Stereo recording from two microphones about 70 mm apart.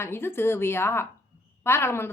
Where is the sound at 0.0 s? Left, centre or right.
Left.